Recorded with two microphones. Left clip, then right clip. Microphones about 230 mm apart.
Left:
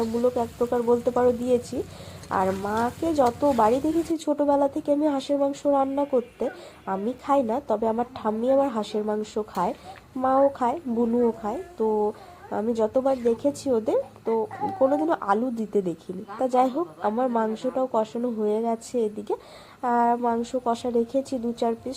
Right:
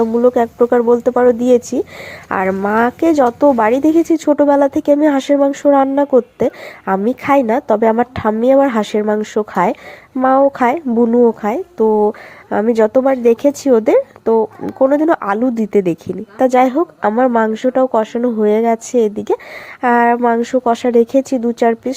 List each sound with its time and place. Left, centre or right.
0.0 s speech: right
6.1 s speech: right